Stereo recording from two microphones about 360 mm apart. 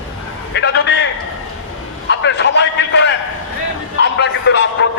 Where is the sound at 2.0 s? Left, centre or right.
Left.